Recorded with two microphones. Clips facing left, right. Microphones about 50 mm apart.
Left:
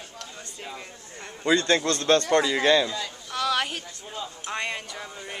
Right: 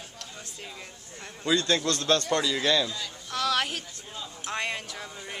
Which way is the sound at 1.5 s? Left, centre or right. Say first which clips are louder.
Left 2 dB; left.